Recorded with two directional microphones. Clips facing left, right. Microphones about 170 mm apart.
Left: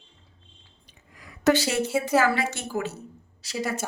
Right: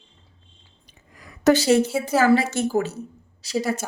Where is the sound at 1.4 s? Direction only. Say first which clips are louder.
Right 5 dB; 40° right (ahead or behind).